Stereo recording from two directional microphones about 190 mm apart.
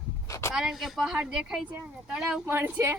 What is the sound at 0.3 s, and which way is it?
Vehicle, 15° left (ahead or behind).